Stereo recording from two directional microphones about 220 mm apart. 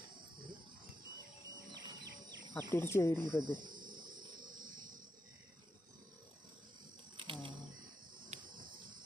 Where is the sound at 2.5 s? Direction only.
10° left (ahead or behind).